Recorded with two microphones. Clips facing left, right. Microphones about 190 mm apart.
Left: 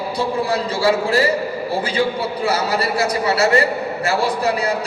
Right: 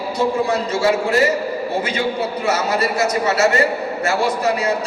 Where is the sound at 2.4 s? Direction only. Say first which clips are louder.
Even; 30° left (ahead or behind).